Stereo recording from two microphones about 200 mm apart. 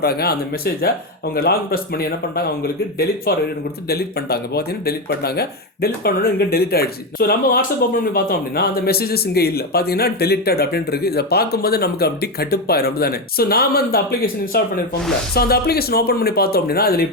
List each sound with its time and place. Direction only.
0.0 s speech: 50° left (ahead or behind)